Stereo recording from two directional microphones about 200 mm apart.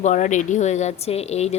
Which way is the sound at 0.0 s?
40° left (ahead or behind).